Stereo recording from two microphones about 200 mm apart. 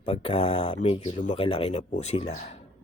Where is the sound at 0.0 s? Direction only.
30° left (ahead or behind).